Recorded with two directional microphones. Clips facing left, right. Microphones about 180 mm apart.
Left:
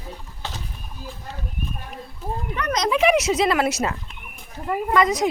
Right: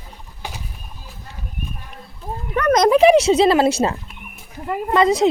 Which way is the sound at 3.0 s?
30° right (ahead or behind).